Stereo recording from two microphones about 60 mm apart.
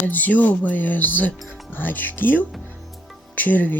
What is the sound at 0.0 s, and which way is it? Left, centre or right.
Speech, left.